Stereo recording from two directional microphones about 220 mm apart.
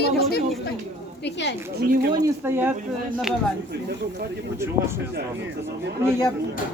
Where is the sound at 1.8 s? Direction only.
45° right (ahead or behind).